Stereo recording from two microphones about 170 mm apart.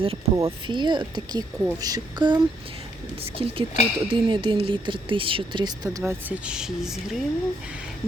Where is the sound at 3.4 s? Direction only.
30° right (ahead or behind).